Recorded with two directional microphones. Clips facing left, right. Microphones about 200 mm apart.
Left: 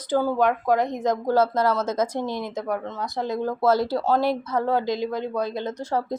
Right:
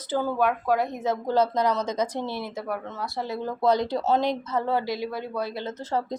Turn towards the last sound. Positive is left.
turn(degrees=10)  # may be behind; listen again after turning